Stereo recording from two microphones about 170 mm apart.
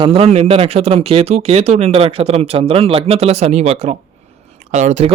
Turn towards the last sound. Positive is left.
turn(degrees=-40)  # may be behind; listen again after turning